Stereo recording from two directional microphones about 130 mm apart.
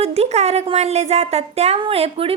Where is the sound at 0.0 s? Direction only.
55° right (ahead or behind).